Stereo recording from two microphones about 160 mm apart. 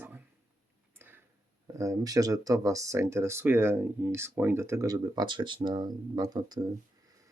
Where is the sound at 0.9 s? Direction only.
15° right (ahead or behind).